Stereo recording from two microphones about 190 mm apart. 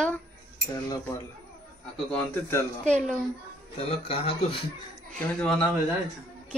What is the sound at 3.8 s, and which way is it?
Speech, 30° left (ahead or behind).